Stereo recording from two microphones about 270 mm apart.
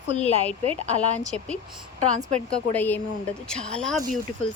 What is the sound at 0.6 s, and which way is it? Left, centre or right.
Speech, right.